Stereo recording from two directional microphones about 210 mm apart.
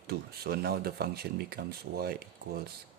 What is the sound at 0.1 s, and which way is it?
Speech, 50° right (ahead or behind).